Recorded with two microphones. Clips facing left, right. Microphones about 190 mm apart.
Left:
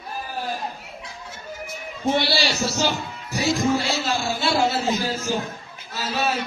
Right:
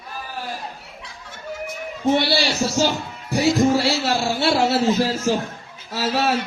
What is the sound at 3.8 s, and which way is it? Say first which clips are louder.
Speech: right 4 dB; 75° right (ahead or behind).